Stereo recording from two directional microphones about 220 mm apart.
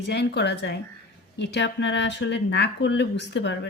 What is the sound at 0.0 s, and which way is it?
Speech, 50° left (ahead or behind).